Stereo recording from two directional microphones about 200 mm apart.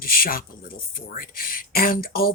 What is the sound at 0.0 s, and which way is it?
Speech, 45° left (ahead or behind).